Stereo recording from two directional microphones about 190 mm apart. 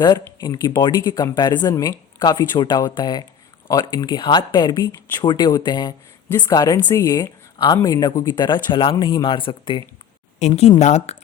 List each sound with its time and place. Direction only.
0.0 s a woman's voice: 20° left (ahead or behind); by 11.2 s 35° left (ahead or behind)